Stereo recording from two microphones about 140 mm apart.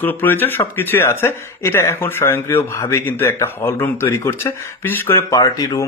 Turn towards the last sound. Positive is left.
turn(degrees=25)  # may be behind; listen again after turning